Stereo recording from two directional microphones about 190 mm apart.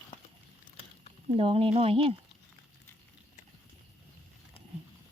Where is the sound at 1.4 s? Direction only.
30° right (ahead or behind).